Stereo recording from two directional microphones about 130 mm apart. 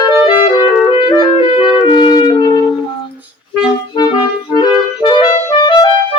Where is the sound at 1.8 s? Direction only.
40° left (ahead or behind).